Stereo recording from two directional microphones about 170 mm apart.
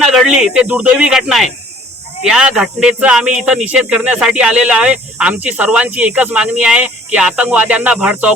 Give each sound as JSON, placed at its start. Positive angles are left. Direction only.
{"t": 0.0, "sound": "a man's voice", "side_deg": -5}